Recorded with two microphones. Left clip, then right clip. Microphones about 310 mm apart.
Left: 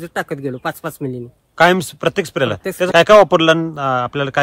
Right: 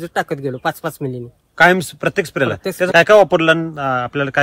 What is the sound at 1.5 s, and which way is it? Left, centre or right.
Speech, centre.